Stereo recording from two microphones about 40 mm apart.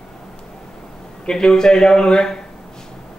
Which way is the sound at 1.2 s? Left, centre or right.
Centre.